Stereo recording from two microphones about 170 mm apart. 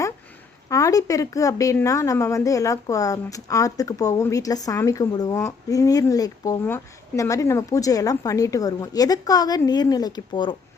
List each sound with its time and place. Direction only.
0.7 s a woman's voice: 20° left (ahead or behind)